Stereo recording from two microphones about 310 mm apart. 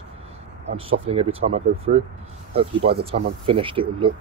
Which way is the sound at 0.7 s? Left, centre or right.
Centre.